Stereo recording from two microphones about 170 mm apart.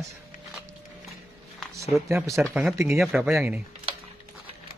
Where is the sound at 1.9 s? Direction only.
15° right (ahead or behind).